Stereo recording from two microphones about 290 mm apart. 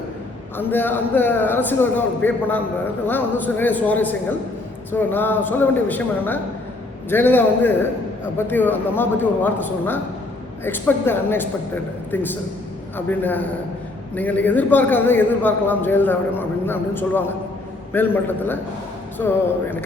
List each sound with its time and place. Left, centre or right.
0.5 s a man's voice: centre